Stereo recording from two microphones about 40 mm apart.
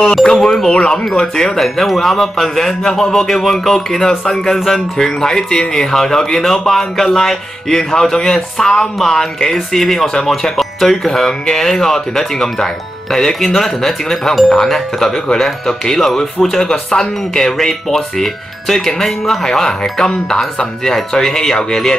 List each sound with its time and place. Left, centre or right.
0.0 s speech: centre
1.0 s speech: centre
19.8 s speech: left